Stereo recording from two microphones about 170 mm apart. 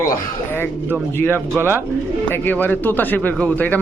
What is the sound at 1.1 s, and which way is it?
Speech, 10° left (ahead or behind).